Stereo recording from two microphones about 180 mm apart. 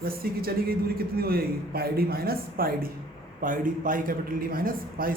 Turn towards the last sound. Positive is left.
turn(degrees=-55)  # may be behind; listen again after turning